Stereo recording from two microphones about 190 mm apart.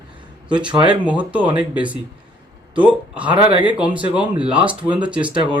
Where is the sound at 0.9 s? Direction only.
5° right (ahead or behind).